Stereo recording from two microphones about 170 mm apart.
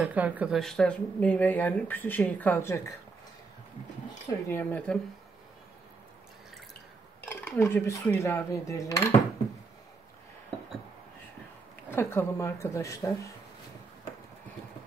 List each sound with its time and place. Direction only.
0.0 s speech: 10° right (ahead or behind)
0.6 s speech: 5° left (ahead or behind)
4.5 s speech: 10° left (ahead or behind)
7.2 s speech: 10° left (ahead or behind)
11.9 s speech: 15° left (ahead or behind)